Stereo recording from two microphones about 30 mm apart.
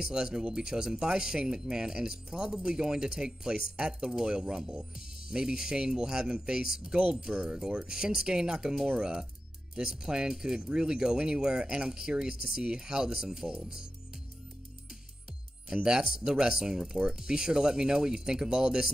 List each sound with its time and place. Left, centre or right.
0.0 s speech: right
7.0 s speech: right
7.4 s speech: right
15.7 s speech: right